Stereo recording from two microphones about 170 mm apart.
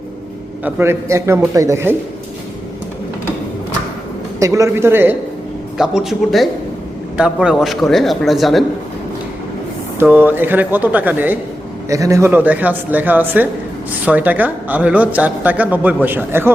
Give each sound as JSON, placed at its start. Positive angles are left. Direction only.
{"t": 0.6, "sound": "speech", "side_deg": -15}
{"t": 4.4, "sound": "speech", "side_deg": -20}
{"t": 10.0, "sound": "speech", "side_deg": -10}